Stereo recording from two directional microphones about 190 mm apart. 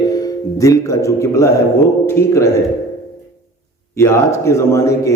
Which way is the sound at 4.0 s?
15° left (ahead or behind).